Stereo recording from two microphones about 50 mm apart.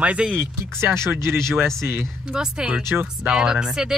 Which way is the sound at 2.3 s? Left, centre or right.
Centre.